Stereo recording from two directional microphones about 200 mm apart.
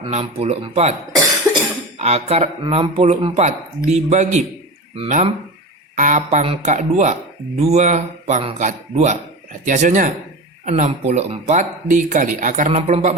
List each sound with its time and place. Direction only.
0.0 s speech: 30° right (ahead or behind)
2.0 s speech: 35° right (ahead or behind)